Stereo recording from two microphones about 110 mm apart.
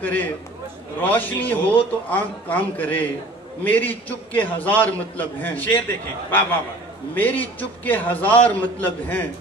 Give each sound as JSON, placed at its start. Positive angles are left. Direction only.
{"t": 0.0, "sound": "a man's voice", "side_deg": 15}